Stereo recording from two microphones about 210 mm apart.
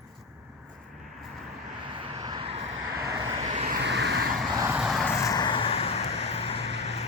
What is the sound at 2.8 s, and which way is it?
Vehicle, 15° right (ahead or behind).